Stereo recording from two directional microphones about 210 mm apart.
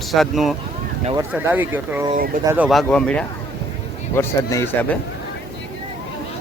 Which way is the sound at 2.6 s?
Centre (ahead or behind).